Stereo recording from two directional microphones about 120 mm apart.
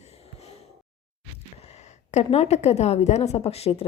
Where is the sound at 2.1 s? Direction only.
65° left (ahead or behind).